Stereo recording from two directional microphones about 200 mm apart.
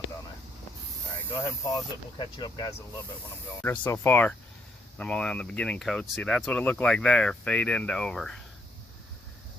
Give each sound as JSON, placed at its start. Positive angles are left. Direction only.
{"t": 1.3, "sound": "speech", "side_deg": 15}
{"t": 3.6, "sound": "speech", "side_deg": 10}